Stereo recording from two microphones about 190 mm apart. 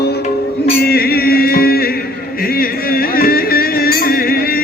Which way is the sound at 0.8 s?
55° left (ahead or behind).